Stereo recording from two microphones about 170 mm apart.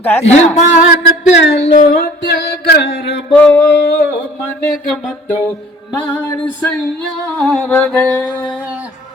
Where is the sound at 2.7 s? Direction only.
90° left.